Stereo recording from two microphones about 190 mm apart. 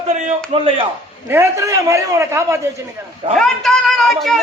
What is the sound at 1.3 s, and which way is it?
A man's voice, 15° right (ahead or behind).